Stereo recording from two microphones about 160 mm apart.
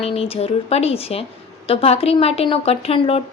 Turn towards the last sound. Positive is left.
turn(degrees=40)  # may be behind; listen again after turning